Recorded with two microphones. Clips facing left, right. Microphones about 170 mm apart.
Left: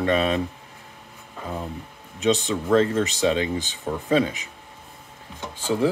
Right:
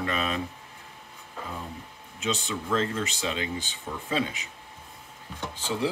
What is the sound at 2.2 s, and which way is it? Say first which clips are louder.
Speech: left 9 dB; 40° left (ahead or behind).